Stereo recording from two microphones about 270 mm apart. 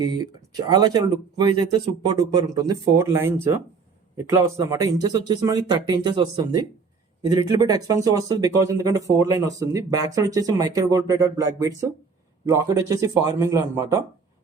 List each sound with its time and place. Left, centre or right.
0.0 s speech: centre